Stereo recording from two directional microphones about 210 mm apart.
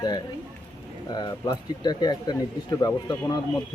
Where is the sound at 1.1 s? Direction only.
20° left (ahead or behind).